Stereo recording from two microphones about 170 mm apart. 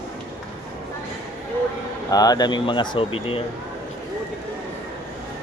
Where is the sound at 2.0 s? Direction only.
20° left (ahead or behind).